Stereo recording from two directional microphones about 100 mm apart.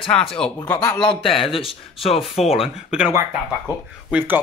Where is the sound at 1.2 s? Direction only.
65° left (ahead or behind).